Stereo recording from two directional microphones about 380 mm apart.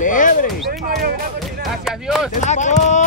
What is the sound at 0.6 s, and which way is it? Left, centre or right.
Speech, right.